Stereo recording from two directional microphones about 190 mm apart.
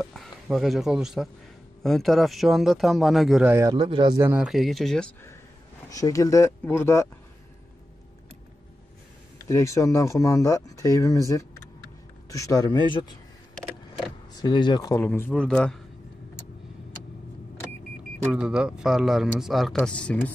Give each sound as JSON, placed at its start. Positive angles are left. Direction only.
{"t": 0.0, "sound": "a man's voice", "side_deg": 0}
{"t": 3.5, "sound": "speech", "side_deg": -20}
{"t": 4.2, "sound": "a man's voice", "side_deg": -10}
{"t": 5.9, "sound": "speech", "side_deg": 20}
{"t": 9.5, "sound": "a man's voice", "side_deg": 15}
{"t": 14.3, "sound": "speech", "side_deg": 20}
{"t": 18.3, "sound": "a man's voice", "side_deg": -5}